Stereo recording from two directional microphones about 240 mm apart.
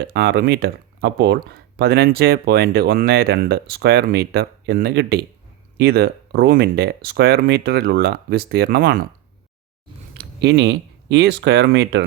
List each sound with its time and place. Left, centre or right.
0.0 s speech: right
10.2 s speech: right